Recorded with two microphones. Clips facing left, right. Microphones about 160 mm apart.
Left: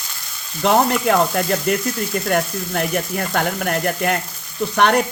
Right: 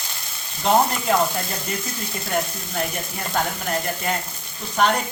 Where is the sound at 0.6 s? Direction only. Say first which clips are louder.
Left 3 dB; 70° left (ahead or behind).